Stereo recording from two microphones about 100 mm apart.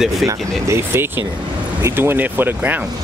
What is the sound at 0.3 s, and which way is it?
Speech, 25° right (ahead or behind).